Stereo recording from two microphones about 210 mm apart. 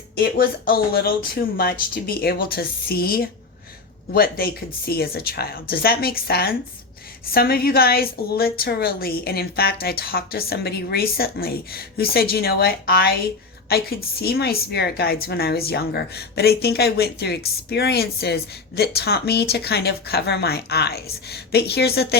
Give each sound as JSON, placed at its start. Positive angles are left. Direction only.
{"t": 0.2, "sound": "a woman's voice", "side_deg": 45}